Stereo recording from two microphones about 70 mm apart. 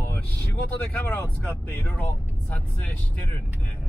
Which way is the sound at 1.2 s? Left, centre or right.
Left.